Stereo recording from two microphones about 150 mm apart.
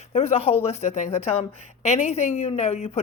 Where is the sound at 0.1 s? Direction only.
40° left (ahead or behind).